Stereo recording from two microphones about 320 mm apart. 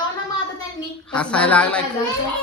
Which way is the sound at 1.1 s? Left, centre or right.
Centre.